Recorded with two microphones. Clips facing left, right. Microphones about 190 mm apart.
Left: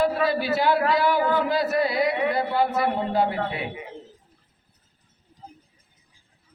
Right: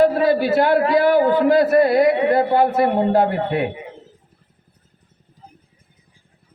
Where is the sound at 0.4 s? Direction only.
55° right (ahead or behind).